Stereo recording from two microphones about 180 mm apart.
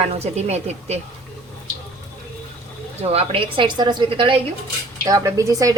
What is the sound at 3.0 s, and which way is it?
A woman's voice, 35° right (ahead or behind).